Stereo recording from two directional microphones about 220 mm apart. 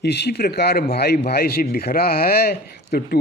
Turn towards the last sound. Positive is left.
turn(degrees=45)  # may be behind; listen again after turning